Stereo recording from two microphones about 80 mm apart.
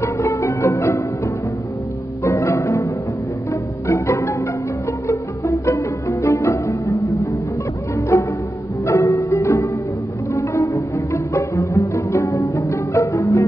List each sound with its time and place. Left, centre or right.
0.0 s music: left
8.1 s music: left
10.3 s cello: left
11.3 s music: left